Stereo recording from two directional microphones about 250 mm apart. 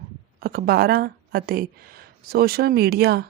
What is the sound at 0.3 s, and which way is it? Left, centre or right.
A woman's voice, right.